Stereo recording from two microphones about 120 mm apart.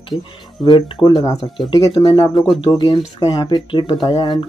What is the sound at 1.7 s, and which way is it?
Speech, 40° left (ahead or behind).